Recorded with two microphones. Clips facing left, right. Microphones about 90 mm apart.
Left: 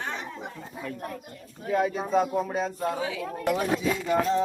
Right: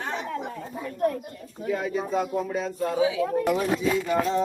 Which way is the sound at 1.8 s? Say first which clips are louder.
Left 1 dB; 35° left (ahead or behind).